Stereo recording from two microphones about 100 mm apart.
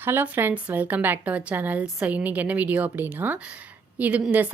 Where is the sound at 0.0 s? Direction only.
20° right (ahead or behind).